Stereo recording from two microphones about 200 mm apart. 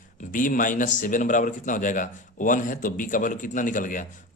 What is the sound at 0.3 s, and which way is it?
Speech, 40° left (ahead or behind).